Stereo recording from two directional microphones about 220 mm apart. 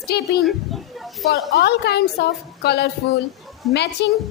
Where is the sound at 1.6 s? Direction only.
45° left (ahead or behind).